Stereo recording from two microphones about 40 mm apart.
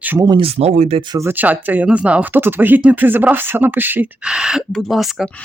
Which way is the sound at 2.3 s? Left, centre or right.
Right.